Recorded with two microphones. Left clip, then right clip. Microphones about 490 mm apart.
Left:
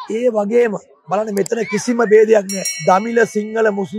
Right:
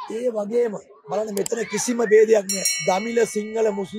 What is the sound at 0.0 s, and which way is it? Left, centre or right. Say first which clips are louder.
Speech: left 8 dB; left.